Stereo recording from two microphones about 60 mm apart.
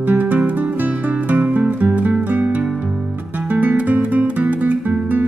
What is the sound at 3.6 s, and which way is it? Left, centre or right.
Music, right.